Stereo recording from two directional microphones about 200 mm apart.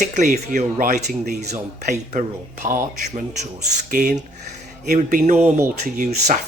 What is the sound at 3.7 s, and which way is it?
Speech, 35° right (ahead or behind).